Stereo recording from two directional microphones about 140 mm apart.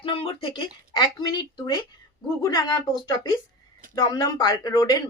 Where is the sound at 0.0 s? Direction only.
40° left (ahead or behind).